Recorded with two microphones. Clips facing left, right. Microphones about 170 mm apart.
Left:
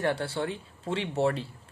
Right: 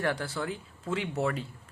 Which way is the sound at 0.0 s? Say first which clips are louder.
Left 2 dB; 25° left (ahead or behind).